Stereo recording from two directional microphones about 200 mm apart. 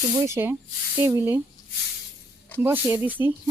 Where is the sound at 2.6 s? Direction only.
10° right (ahead or behind).